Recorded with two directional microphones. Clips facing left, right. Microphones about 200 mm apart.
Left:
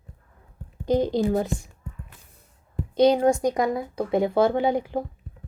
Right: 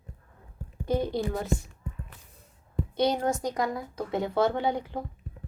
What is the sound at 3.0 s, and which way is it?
Speech, 15° left (ahead or behind).